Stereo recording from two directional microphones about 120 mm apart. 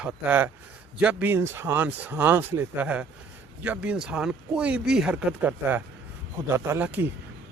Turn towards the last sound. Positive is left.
turn(degrees=-15)  # may be behind; listen again after turning